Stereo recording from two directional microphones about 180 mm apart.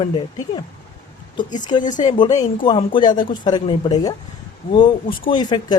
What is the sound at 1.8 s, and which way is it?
Speech, 45° left (ahead or behind).